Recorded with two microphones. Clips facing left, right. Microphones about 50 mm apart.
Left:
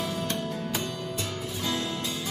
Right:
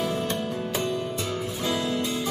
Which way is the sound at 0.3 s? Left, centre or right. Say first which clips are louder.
Right 3 dB; centre.